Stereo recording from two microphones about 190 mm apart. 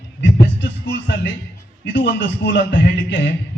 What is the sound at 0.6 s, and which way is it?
A man's voice, 65° left (ahead or behind).